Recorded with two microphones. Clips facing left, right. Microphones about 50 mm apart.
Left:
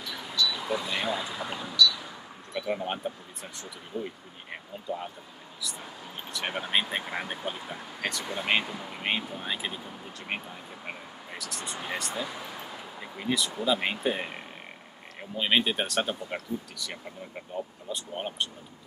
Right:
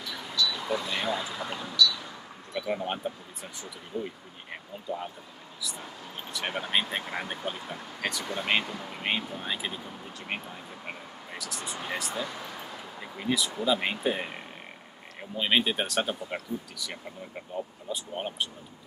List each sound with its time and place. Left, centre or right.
0.0 s speech: centre
4.0 s speech: centre
6.3 s speech: centre